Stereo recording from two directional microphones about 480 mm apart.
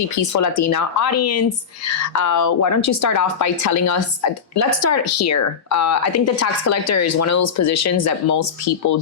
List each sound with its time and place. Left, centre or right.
0.3 s speech: left